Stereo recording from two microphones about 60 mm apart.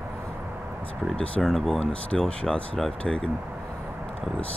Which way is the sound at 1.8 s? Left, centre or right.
Centre.